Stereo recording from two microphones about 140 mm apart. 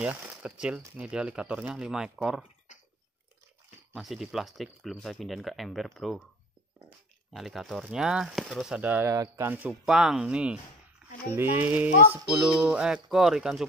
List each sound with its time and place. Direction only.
0.0 s speech: 10° right (ahead or behind)
2.7 s chewing: 60° left (ahead or behind)
3.9 s speech: centre (ahead or behind)
7.3 s speech: centre (ahead or behind)
9.1 s speech: 25° right (ahead or behind)
9.5 s speech: 10° right (ahead or behind)
11.0 s a sound: 5° right (ahead or behind)
11.3 s speech: 15° right (ahead or behind)